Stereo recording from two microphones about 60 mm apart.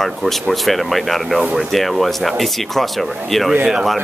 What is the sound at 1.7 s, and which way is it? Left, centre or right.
Speech, centre.